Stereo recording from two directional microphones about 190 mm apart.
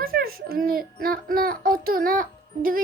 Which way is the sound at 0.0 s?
50° right (ahead or behind).